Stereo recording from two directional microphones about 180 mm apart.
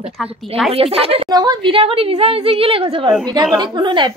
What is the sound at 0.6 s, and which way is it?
Speech, 35° right (ahead or behind).